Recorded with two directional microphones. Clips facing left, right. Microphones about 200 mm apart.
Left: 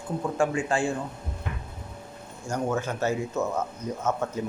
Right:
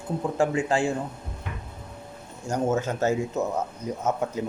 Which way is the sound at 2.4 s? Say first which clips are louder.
Right 3 dB; 20° right (ahead or behind).